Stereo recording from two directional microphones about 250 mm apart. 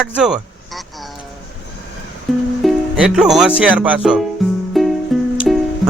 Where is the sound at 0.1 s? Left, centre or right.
Centre.